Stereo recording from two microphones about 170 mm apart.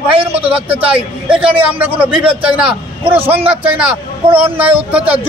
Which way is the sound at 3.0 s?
35° right (ahead or behind).